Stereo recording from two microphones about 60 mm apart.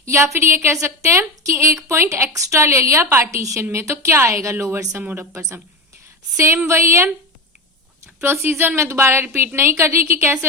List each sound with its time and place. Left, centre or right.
0.0 s a woman's voice: right
6.3 s a woman's voice: right